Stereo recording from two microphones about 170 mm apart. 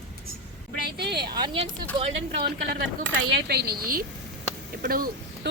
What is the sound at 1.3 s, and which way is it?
Speech, 30° right (ahead or behind).